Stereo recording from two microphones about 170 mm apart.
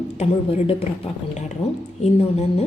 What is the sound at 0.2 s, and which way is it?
A woman's voice, 35° left (ahead or behind).